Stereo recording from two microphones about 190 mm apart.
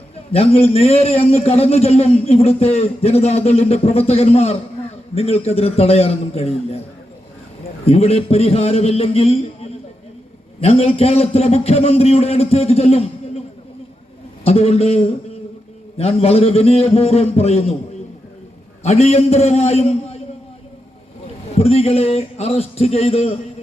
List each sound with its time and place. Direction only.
0.3 s a man's voice: 30° left (ahead or behind)
7.9 s a man's voice: 30° left (ahead or behind)
14.4 s a man's voice: 30° left (ahead or behind)
18.8 s a man's voice: 35° left (ahead or behind)
21.5 s a man's voice: 30° left (ahead or behind)